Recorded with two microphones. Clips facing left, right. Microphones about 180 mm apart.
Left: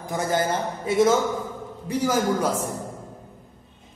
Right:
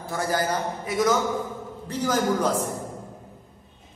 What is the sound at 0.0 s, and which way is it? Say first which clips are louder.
A man's voice: left 2 dB; 20° left (ahead or behind).